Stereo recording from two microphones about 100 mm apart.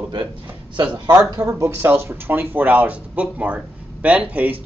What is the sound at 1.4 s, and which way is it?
Speech, 30° right (ahead or behind).